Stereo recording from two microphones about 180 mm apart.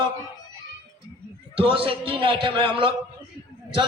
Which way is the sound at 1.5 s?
30° right (ahead or behind).